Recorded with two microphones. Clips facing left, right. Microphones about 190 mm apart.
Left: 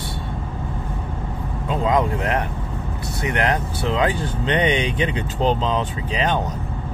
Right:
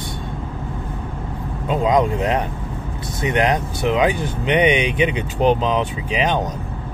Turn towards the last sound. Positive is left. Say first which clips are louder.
# right 2 dB
turn(degrees=-15)  # may be behind; listen again after turning